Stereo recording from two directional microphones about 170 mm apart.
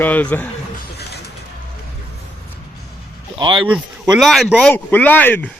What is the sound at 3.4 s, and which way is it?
Speech, 30° right (ahead or behind).